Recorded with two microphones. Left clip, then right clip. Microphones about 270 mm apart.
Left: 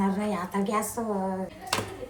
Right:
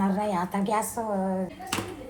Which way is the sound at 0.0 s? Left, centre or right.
Right.